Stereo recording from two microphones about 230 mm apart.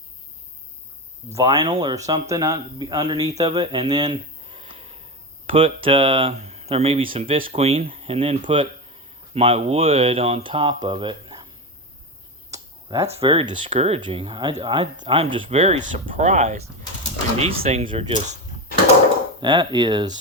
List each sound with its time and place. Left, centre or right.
1.3 s speech: centre
3.4 s a sound: centre
5.5 s speech: right
12.5 s a sound: centre
13.1 s speech: right
19.4 s speech: centre